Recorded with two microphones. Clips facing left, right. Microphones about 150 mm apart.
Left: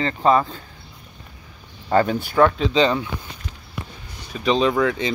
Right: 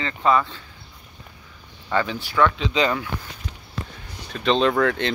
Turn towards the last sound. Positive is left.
turn(degrees=5)  # may be behind; listen again after turning